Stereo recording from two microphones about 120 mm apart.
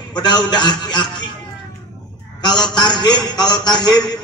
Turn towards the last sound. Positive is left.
turn(degrees=35)  # may be behind; listen again after turning